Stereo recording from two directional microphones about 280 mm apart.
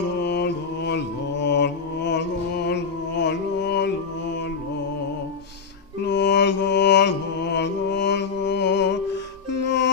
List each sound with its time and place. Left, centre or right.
0.2 s mantra: left
6.1 s music: left